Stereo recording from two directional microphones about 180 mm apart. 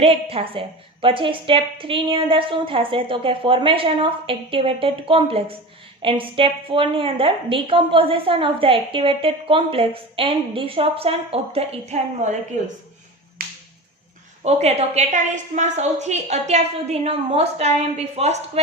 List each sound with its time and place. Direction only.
0.0 s a woman's voice: 35° right (ahead or behind)
13.4 s finger snapping: 55° right (ahead or behind)
14.4 s a woman's voice: 35° right (ahead or behind)